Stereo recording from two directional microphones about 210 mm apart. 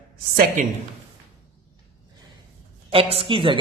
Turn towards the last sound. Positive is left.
turn(degrees=-25)  # may be behind; listen again after turning